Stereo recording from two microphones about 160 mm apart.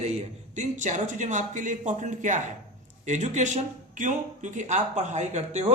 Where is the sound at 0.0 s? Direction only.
45° right (ahead or behind).